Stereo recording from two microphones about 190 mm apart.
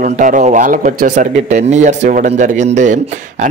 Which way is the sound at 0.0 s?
45° right (ahead or behind).